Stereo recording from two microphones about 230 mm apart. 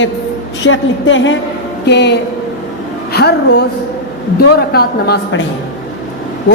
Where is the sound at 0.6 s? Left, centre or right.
Left.